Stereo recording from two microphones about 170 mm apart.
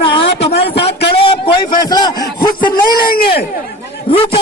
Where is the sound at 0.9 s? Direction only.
75° left (ahead or behind).